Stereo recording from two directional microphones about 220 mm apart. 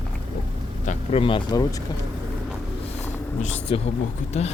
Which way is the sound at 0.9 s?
25° left (ahead or behind).